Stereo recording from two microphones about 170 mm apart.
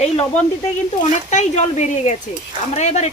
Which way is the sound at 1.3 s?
45° left (ahead or behind).